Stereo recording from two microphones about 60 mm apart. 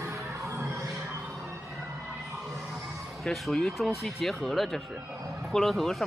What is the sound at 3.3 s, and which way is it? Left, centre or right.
Speech, centre.